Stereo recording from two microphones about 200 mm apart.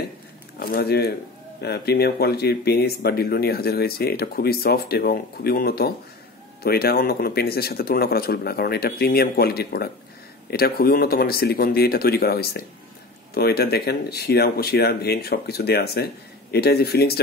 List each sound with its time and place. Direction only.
0.6 s speech: 50° left (ahead or behind)